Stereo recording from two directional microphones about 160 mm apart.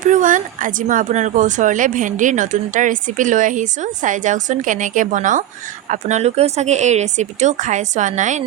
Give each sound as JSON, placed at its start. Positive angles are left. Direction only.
{"t": 0.0, "sound": "speech", "side_deg": -55}